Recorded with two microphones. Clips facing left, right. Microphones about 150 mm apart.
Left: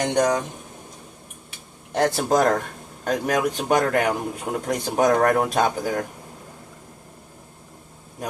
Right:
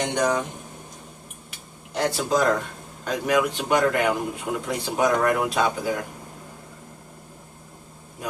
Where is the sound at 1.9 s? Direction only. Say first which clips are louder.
Left 3 dB; 50° left (ahead or behind).